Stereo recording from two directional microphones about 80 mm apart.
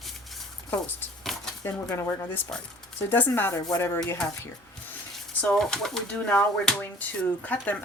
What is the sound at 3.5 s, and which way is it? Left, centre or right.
Speech, left.